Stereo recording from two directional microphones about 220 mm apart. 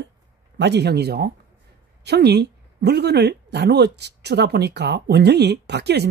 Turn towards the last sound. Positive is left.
turn(degrees=-50)  # may be behind; listen again after turning